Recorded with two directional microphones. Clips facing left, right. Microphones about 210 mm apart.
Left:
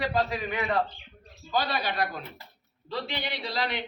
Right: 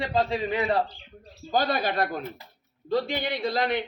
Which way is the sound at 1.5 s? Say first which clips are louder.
Right 4 dB; 45° right (ahead or behind).